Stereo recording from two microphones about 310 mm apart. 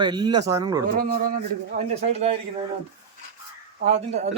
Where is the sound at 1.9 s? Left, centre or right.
Centre.